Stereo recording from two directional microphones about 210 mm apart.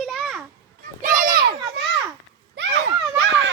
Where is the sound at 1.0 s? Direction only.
40° right (ahead or behind).